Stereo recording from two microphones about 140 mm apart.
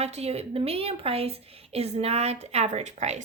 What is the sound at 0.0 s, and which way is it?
Speech, 50° right (ahead or behind).